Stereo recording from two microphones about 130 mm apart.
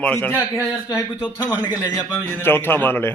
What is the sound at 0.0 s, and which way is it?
A man's voice, 10° left (ahead or behind).